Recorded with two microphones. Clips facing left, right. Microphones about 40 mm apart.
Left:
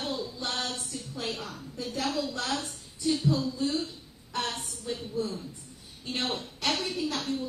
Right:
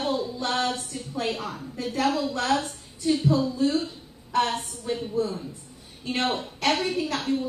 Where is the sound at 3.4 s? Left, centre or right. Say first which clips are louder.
Right 6 dB; centre.